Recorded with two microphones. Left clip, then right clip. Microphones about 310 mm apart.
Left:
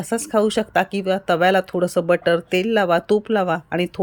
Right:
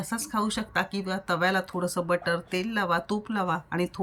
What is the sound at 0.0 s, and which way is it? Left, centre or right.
A woman's voice, centre.